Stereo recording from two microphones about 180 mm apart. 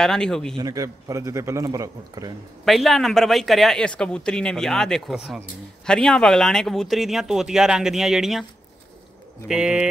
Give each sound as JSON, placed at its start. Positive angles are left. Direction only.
{"t": 0.0, "sound": "a man's voice", "side_deg": 5}
{"t": 0.6, "sound": "a man's voice", "side_deg": -20}
{"t": 2.6, "sound": "a man's voice", "side_deg": 0}
{"t": 9.5, "sound": "a man's voice", "side_deg": -5}